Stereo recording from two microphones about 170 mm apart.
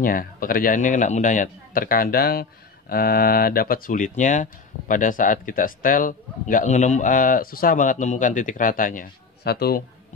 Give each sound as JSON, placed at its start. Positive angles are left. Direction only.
{"t": 0.0, "sound": "a man's voice", "side_deg": 55}